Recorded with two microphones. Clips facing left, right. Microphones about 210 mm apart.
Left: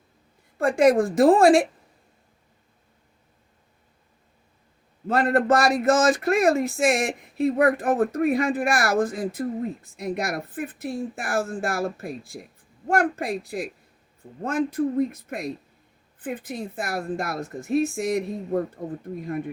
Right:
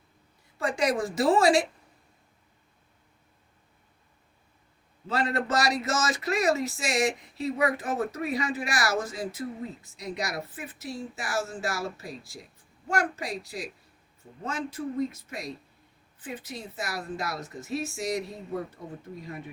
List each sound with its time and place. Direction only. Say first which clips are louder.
0.6 s a woman's voice: left 9 dB; 55° left (ahead or behind)
5.0 s speech: left 8 dB; 55° left (ahead or behind)